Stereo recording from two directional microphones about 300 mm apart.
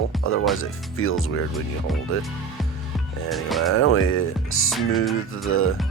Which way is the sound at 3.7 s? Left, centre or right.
Left.